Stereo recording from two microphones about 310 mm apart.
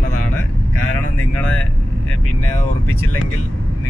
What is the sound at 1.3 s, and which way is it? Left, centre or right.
Vehicle, centre.